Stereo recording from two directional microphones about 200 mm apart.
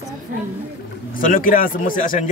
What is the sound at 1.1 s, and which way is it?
A man's voice, 45° left (ahead or behind).